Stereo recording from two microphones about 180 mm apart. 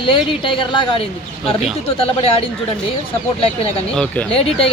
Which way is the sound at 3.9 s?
5° left (ahead or behind).